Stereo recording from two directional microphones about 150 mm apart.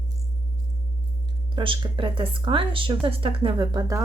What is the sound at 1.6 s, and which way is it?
Speech, 35° right (ahead or behind).